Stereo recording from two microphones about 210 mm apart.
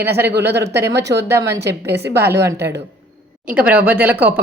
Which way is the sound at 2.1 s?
10° right (ahead or behind).